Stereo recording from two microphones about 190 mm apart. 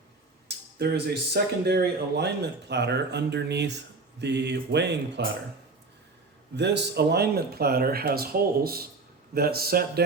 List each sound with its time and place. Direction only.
0.4 s speech: 55° right (ahead or behind)
6.6 s a man's voice: 65° right (ahead or behind)